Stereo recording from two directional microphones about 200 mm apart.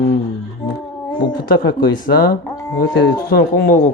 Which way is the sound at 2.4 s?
15° left (ahead or behind).